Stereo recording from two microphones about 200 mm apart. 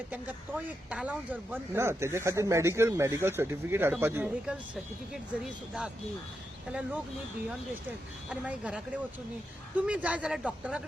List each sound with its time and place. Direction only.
0.1 s speech: 5° right (ahead or behind)
6.7 s speech: 5° right (ahead or behind)
8.3 s speech: 5° right (ahead or behind)